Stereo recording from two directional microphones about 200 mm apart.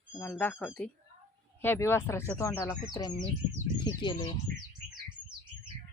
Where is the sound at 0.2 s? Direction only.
10° left (ahead or behind); by 4.3 s 25° left (ahead or behind).